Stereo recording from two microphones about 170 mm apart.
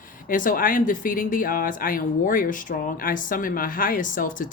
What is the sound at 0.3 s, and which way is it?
Speech, 50° left (ahead or behind).